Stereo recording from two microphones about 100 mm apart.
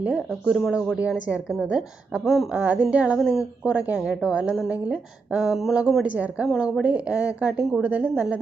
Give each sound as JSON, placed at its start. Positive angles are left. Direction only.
{"t": 0.0, "sound": "a woman's voice", "side_deg": -10}